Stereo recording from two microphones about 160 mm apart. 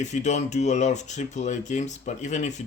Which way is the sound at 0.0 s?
45° left (ahead or behind).